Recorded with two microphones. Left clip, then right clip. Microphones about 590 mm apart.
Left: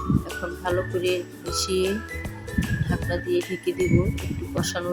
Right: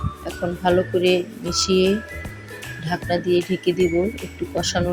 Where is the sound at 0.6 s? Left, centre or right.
Left.